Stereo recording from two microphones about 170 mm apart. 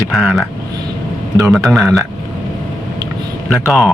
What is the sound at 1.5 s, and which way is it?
Speech, centre (ahead or behind).